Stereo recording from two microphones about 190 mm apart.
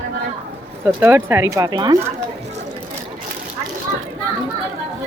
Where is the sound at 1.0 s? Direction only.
10° right (ahead or behind).